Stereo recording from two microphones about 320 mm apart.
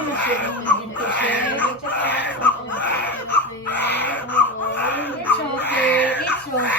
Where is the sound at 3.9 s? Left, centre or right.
Centre.